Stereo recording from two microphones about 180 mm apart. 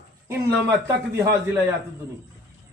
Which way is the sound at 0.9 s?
20° right (ahead or behind).